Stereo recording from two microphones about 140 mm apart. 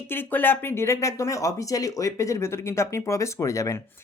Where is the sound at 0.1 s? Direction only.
15° left (ahead or behind).